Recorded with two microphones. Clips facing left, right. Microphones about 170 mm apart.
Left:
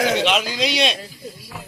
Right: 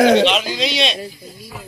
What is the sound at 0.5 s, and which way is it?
Speech, 10° left (ahead or behind).